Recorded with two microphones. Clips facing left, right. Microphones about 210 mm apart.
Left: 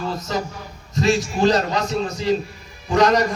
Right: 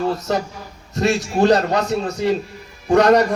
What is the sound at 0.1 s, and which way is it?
A man's voice, 60° right (ahead or behind).